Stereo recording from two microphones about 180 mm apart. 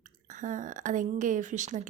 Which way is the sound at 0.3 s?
45° right (ahead or behind).